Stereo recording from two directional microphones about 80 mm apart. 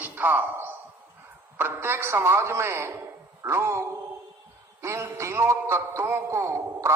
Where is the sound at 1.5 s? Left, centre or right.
Right.